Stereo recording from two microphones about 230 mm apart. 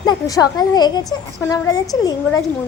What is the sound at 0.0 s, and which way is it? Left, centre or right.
A woman's voice, centre.